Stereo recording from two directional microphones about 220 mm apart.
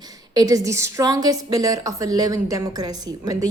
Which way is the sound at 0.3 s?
15° right (ahead or behind).